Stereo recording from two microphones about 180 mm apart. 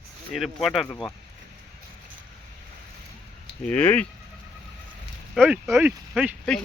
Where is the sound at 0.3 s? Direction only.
Centre (ahead or behind).